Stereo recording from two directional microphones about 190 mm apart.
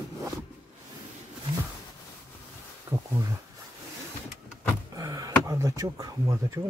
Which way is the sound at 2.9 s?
20° right (ahead or behind).